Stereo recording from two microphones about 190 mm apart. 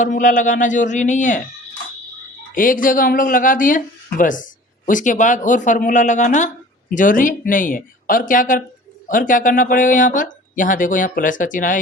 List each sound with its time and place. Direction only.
0.0 s speech: 40° left (ahead or behind)
2.6 s speech: 45° left (ahead or behind)